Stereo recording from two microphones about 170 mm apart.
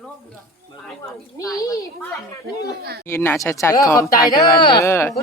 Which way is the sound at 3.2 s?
15° left (ahead or behind).